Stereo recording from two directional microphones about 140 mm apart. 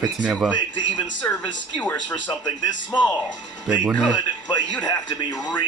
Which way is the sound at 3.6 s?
10° right (ahead or behind).